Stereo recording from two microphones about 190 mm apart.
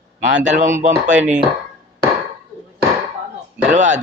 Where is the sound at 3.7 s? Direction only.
40° right (ahead or behind).